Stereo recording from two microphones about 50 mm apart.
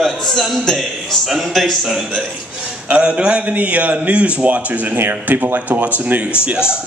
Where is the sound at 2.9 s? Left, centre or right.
Centre.